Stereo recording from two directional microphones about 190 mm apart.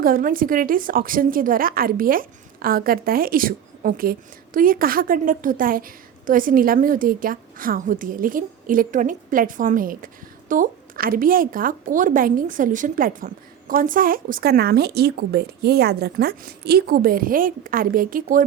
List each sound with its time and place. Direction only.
0.0 s a woman's voice: 45° right (ahead or behind)